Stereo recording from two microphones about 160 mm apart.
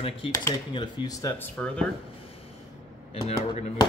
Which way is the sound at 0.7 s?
25° left (ahead or behind).